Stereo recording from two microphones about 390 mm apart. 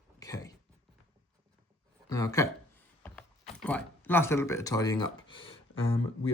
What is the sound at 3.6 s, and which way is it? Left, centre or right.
Speech, centre.